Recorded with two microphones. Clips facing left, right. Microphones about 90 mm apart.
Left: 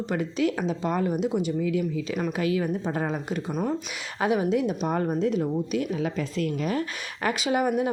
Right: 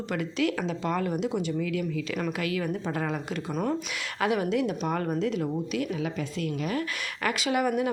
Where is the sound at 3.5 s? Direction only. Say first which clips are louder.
Even; 5° left (ahead or behind).